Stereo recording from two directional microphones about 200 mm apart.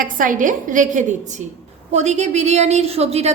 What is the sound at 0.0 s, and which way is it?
A woman's voice, 40° right (ahead or behind).